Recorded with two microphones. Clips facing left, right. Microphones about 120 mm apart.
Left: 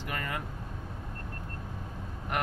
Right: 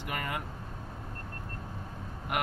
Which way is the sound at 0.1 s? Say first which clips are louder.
Right 1 dB; 15° right (ahead or behind).